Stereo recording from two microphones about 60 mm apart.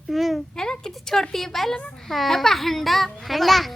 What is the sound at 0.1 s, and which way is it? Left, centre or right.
A woman's voice, centre.